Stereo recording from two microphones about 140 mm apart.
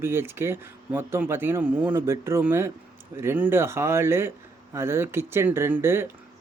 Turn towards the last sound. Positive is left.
turn(degrees=-15)  # may be behind; listen again after turning